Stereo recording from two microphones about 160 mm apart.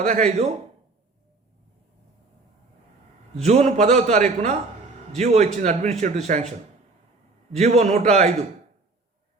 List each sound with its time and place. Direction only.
0.1 s a man's voice: 45° right (ahead or behind)
3.4 s a man's voice: 45° right (ahead or behind)
7.5 s a man's voice: 40° right (ahead or behind)